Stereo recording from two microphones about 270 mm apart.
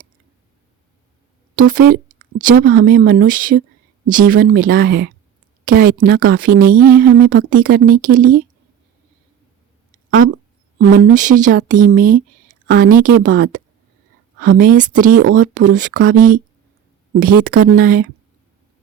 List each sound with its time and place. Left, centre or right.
1.5 s speech: right
10.8 s speech: right